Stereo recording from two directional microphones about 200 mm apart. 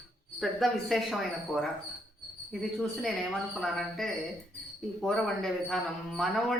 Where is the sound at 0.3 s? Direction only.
Centre (ahead or behind).